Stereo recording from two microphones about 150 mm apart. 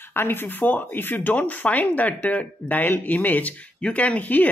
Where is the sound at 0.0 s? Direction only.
15° left (ahead or behind).